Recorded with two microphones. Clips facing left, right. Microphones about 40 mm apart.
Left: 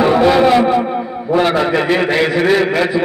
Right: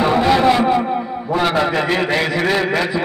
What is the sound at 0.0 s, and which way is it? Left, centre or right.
Music, centre.